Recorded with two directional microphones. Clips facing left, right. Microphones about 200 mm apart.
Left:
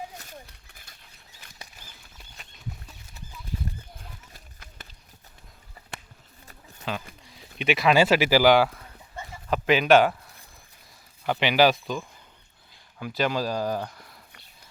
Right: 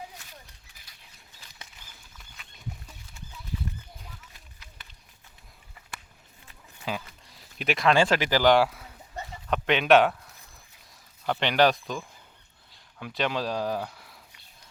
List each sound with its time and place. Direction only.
0.2 s a sound: 50° left (ahead or behind)
2.1 s patter: 40° left (ahead or behind)
4.4 s run: 45° left (ahead or behind)
6.8 s a man's voice: 5° right (ahead or behind)